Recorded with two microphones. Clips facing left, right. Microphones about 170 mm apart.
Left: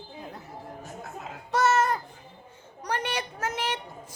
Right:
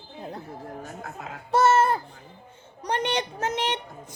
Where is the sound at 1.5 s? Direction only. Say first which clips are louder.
Right 4 dB; 30° right (ahead or behind).